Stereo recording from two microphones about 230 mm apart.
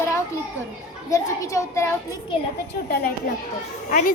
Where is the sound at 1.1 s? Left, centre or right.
Centre.